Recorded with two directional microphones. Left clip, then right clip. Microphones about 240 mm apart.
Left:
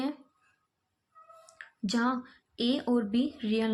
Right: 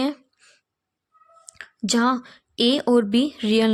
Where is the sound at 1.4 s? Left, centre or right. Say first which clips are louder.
Right 11 dB; right.